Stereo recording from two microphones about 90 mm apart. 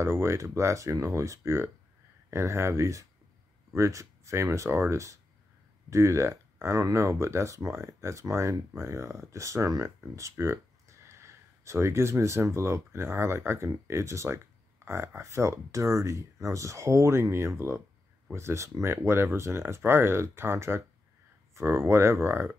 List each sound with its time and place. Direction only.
0.0 s speech: 30° right (ahead or behind)